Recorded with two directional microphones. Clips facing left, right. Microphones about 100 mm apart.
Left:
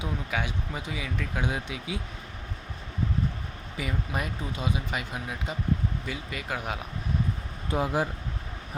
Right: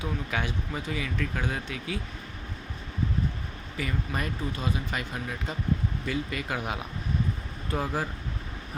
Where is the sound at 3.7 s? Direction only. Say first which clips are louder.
Even; 10° left (ahead or behind).